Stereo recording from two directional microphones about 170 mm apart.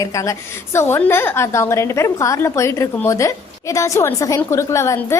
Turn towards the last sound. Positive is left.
turn(degrees=15)  # may be behind; listen again after turning